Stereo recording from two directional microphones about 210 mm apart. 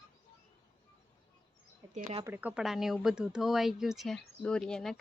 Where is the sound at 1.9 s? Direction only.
35° right (ahead or behind).